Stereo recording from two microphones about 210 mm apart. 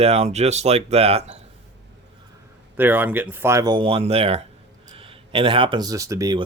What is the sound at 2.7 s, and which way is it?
Speech, 10° right (ahead or behind).